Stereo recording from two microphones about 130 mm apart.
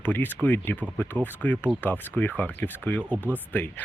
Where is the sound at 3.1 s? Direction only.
10° right (ahead or behind).